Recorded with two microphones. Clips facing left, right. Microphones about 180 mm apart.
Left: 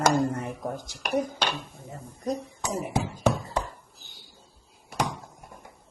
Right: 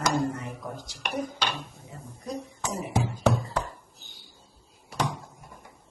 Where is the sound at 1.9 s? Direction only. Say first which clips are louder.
Left 5 dB; 50° left (ahead or behind).